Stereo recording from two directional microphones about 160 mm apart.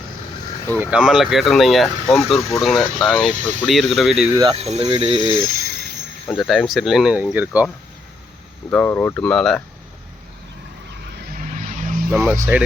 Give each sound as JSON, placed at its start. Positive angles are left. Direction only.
{"t": 0.8, "sound": "speech", "side_deg": -5}
{"t": 4.4, "sound": "speech", "side_deg": -30}
{"t": 4.6, "sound": "speech", "side_deg": -40}
{"t": 5.0, "sound": "speech", "side_deg": -30}
{"t": 5.6, "sound": "jingle bell", "side_deg": -90}
{"t": 6.2, "sound": "speech", "side_deg": 0}
{"t": 8.7, "sound": "speech", "side_deg": 10}
{"t": 11.5, "sound": "vehicle", "side_deg": -50}
{"t": 12.5, "sound": "speech", "side_deg": -10}